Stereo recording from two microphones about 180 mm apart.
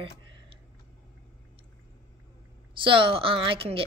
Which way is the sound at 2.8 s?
30° right (ahead or behind).